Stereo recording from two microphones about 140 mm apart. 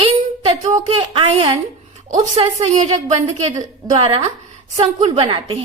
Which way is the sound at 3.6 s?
45° right (ahead or behind).